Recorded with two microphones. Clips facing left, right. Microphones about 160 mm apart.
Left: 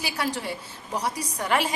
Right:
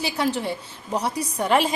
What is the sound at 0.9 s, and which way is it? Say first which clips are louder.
Speech: right 4 dB; 25° right (ahead or behind).